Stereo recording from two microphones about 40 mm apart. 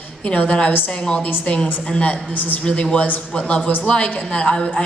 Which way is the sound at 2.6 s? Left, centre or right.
Left.